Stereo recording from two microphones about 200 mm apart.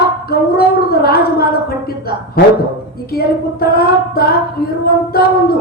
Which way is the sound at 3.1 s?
50° left (ahead or behind).